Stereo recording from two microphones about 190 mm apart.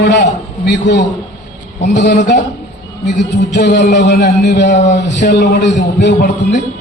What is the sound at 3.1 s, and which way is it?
A man's voice, 65° left (ahead or behind).